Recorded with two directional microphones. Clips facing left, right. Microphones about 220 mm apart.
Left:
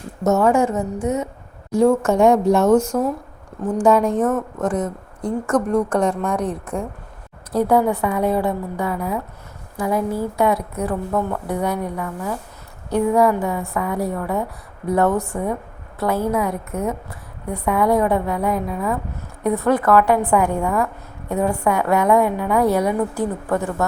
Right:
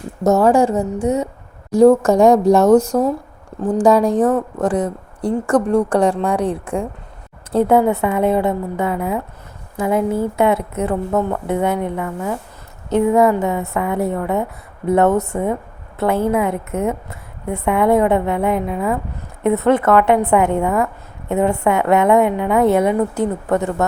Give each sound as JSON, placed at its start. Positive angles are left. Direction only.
{"t": 0.3, "sound": "a woman's voice", "side_deg": -35}